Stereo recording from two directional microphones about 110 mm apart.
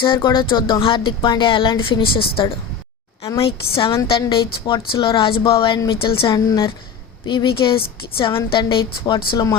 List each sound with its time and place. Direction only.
0.0 s a woman's voice: 45° left (ahead or behind)
6.3 s speech: 35° left (ahead or behind)
7.3 s speech: 45° left (ahead or behind)